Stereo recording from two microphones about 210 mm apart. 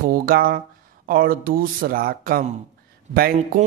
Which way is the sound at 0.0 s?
45° right (ahead or behind).